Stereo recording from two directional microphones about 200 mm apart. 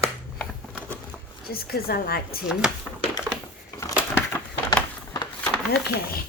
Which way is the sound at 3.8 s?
15° left (ahead or behind).